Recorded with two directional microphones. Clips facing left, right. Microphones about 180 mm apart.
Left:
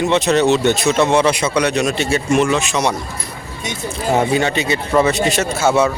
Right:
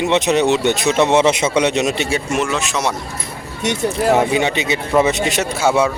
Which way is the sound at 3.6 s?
70° right (ahead or behind).